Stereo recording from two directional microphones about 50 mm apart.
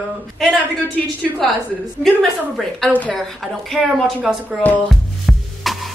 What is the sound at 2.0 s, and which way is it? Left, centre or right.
Speech, centre.